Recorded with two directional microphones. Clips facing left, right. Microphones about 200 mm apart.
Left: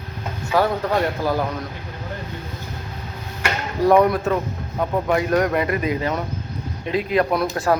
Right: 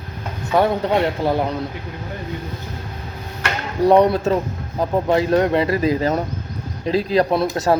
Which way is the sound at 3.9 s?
20° right (ahead or behind).